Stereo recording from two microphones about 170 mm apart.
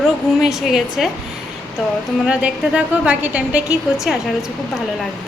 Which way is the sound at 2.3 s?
5° right (ahead or behind).